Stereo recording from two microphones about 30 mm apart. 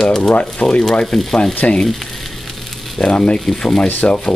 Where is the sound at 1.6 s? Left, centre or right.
Left.